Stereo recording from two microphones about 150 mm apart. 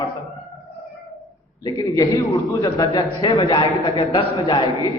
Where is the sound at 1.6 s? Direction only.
25° left (ahead or behind).